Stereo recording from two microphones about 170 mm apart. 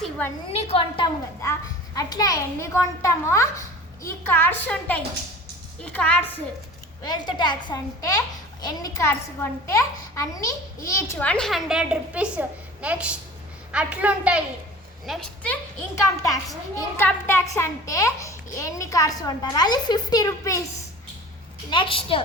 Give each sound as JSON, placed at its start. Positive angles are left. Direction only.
{"t": 0.7, "sound": "a woman's voice", "side_deg": 30}
{"t": 7.0, "sound": "a child's voice", "side_deg": 25}
{"t": 16.0, "sound": "a child's voice", "side_deg": 20}
{"t": 21.7, "sound": "a woman's voice", "side_deg": 30}